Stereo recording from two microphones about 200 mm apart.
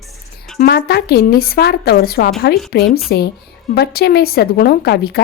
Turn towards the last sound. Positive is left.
turn(degrees=55)  # may be behind; listen again after turning